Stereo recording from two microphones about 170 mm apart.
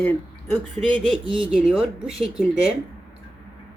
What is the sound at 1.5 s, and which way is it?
Speech, 5° right (ahead or behind).